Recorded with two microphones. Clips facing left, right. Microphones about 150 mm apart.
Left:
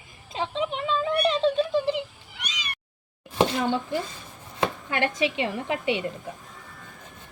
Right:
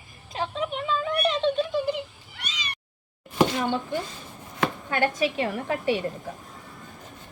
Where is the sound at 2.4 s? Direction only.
10° left (ahead or behind).